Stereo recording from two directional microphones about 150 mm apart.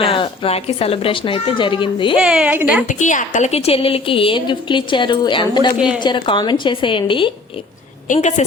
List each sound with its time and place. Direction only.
0.0 s a woman's voice: 35° left (ahead or behind)
2.1 s a woman's voice: 5° right (ahead or behind)
2.8 s a woman's voice: 55° left (ahead or behind); by 7.3 s 35° left (ahead or behind)
8.0 s a woman's voice: 55° left (ahead or behind)